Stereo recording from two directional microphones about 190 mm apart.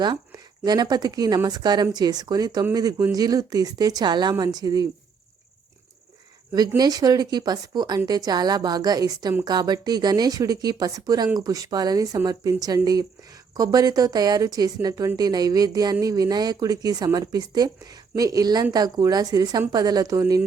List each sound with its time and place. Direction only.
0.6 s speech: 20° right (ahead or behind)
6.5 s speech: 20° right (ahead or behind)